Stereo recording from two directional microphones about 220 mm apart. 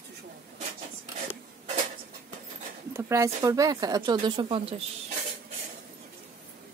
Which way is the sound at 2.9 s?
10° right (ahead or behind).